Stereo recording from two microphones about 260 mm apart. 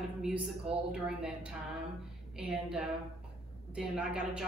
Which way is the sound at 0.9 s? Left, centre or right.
Centre.